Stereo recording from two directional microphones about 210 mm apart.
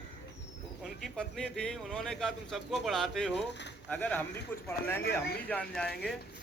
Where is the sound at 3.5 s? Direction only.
55° left (ahead or behind).